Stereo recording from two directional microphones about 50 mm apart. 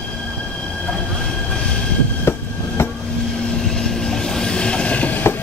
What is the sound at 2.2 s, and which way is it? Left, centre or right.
Train, left.